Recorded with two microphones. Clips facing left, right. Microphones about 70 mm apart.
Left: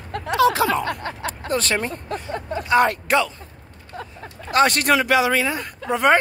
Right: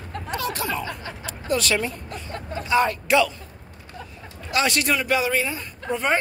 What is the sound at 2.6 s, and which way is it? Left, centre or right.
Speech, left.